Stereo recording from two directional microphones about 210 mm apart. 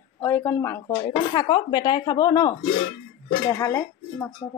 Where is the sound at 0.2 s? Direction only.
10° left (ahead or behind).